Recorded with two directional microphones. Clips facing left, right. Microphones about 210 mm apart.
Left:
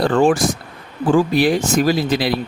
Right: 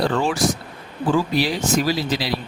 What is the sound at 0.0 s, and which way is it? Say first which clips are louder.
Speech: left 5 dB; 50° left (ahead or behind).